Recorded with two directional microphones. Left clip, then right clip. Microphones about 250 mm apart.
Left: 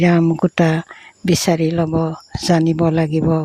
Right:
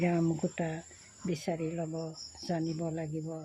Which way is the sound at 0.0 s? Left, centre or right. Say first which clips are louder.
Left 15 dB; left.